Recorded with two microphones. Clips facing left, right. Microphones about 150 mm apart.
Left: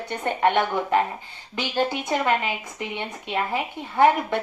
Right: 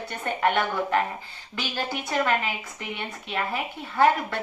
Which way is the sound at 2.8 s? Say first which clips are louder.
Left 3 dB; 20° left (ahead or behind).